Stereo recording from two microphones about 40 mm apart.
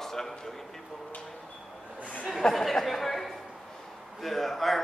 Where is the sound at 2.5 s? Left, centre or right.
Centre.